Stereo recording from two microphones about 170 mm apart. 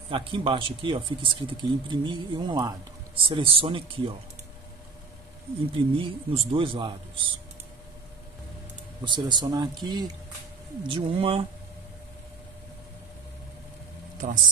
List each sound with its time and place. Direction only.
0.1 s a man's voice: 30° right (ahead or behind)
5.9 s a man's voice: 30° right (ahead or behind)
9.0 s speech: 25° right (ahead or behind)
14.1 s speech: 50° right (ahead or behind)